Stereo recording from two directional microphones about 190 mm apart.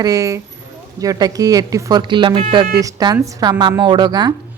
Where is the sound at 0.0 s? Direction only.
20° right (ahead or behind).